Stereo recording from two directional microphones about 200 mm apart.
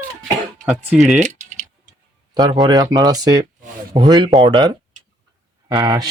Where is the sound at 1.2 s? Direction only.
40° right (ahead or behind).